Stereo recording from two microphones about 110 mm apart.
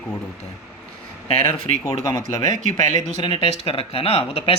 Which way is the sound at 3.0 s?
55° left (ahead or behind).